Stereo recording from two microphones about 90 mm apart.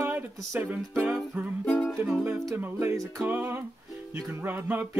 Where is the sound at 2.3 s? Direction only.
30° right (ahead or behind).